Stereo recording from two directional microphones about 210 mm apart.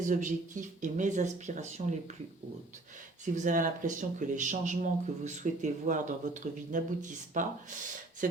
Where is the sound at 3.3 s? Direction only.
40° right (ahead or behind).